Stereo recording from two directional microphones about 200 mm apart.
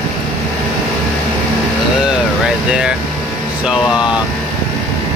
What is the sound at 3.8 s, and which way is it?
Speech, 20° left (ahead or behind).